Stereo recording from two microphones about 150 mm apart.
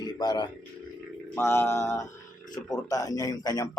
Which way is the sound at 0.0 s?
30° left (ahead or behind).